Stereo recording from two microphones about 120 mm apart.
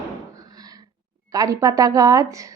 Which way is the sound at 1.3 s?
30° right (ahead or behind).